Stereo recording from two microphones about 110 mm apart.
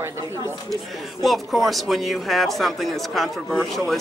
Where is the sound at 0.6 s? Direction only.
Centre (ahead or behind).